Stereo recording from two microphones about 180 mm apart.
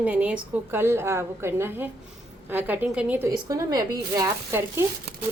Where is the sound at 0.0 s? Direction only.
5° right (ahead or behind).